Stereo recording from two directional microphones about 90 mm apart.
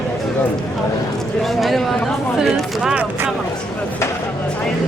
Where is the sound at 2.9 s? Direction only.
25° right (ahead or behind).